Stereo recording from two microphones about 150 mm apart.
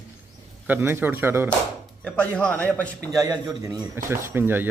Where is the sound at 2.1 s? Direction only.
5° left (ahead or behind).